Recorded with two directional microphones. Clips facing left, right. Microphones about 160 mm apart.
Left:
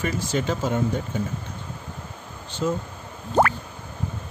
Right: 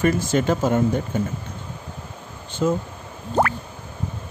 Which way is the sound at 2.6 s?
55° right (ahead or behind).